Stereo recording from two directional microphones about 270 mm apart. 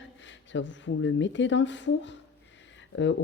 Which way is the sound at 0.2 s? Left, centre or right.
Left.